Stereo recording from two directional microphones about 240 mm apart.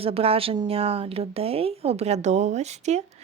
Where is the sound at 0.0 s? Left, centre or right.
Right.